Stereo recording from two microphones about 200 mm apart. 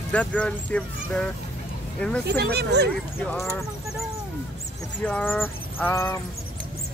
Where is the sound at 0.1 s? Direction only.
5° left (ahead or behind).